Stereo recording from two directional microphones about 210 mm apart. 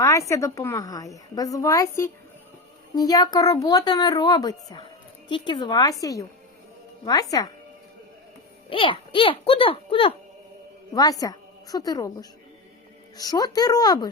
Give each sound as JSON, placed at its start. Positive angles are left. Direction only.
{"t": 0.0, "sound": "a woman's voice", "side_deg": 15}
{"t": 8.7, "sound": "a child's voice", "side_deg": 25}